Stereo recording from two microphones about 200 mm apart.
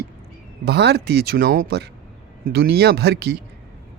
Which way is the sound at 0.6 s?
55° right (ahead or behind).